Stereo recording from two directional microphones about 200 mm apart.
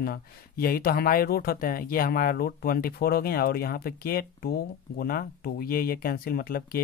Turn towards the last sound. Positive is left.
turn(degrees=45)  # may be behind; listen again after turning